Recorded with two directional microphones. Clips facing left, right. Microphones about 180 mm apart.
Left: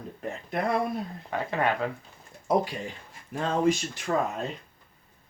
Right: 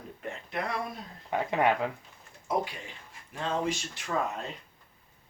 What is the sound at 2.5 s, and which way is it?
Speech, 40° left (ahead or behind).